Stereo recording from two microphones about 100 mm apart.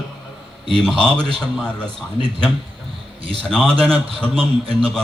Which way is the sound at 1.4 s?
10° left (ahead or behind).